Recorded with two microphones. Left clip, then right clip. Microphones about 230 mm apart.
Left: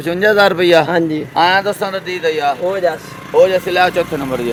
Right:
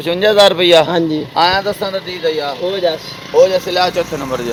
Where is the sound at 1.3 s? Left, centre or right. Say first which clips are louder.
Left 1 dB; left.